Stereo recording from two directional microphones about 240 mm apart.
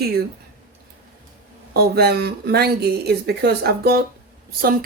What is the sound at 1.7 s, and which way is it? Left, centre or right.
Speech, right.